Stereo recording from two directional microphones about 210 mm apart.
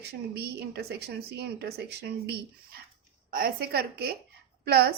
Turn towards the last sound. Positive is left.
turn(degrees=-50)  # may be behind; listen again after turning